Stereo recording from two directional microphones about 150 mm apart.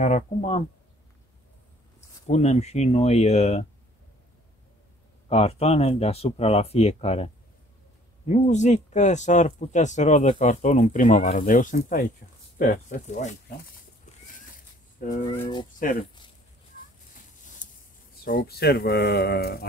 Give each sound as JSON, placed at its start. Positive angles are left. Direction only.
{"t": 0.0, "sound": "speech", "side_deg": 45}
{"t": 2.0, "sound": "speech", "side_deg": 50}
{"t": 5.3, "sound": "speech", "side_deg": 40}
{"t": 8.3, "sound": "speech", "side_deg": 50}
{"t": 15.0, "sound": "speech", "side_deg": 60}
{"t": 15.2, "sound": "speech", "side_deg": 35}
{"t": 15.8, "sound": "speech", "side_deg": 65}
{"t": 18.2, "sound": "speech", "side_deg": 80}